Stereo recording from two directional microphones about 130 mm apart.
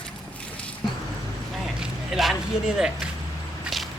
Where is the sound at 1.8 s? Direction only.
Centre (ahead or behind).